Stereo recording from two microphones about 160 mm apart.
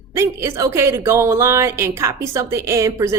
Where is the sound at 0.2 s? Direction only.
15° right (ahead or behind).